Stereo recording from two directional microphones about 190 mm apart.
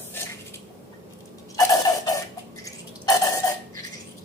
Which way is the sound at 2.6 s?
15° left (ahead or behind).